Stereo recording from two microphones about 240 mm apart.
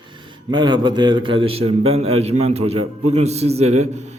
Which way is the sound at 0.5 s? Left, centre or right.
Centre.